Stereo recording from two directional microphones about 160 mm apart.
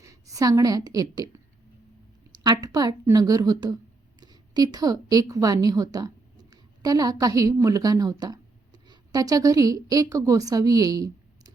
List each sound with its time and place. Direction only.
0.0 s a woman's voice: 20° right (ahead or behind)
2.3 s a woman's voice: 25° right (ahead or behind)